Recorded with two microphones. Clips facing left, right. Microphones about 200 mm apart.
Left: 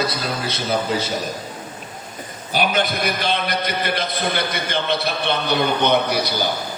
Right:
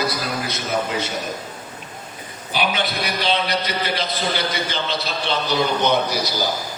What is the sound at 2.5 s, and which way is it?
A man's voice, 45° left (ahead or behind).